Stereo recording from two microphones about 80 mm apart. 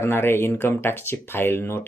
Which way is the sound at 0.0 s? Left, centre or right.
Left.